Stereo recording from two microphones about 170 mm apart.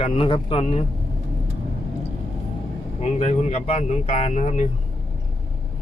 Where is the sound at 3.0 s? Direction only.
40° left (ahead or behind).